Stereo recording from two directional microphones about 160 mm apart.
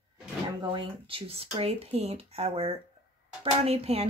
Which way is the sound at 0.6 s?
30° right (ahead or behind).